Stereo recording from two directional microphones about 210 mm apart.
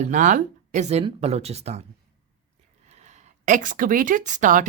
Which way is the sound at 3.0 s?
35° right (ahead or behind).